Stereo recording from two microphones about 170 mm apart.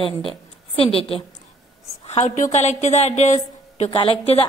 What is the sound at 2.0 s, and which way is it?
A woman's voice, 45° left (ahead or behind).